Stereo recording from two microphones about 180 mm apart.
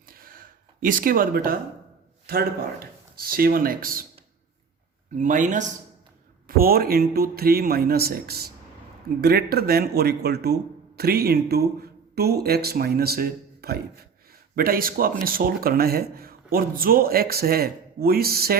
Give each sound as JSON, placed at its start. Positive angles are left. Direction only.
{"t": 0.1, "sound": "a sound", "side_deg": -55}
{"t": 2.2, "sound": "speech", "side_deg": -55}
{"t": 5.1, "sound": "speech", "side_deg": -45}
{"t": 6.6, "sound": "speech", "side_deg": -55}